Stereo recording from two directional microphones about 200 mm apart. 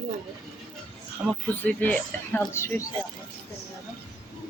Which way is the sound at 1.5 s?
10° left (ahead or behind).